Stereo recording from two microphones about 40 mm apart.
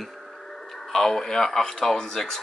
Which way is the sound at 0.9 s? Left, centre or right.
Centre.